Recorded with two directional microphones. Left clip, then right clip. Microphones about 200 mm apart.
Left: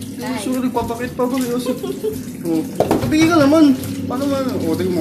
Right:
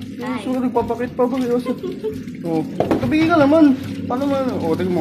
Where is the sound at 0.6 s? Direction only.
20° right (ahead or behind).